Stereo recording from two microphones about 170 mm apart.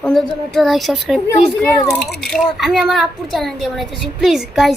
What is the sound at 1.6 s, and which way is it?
Speech, 10° left (ahead or behind).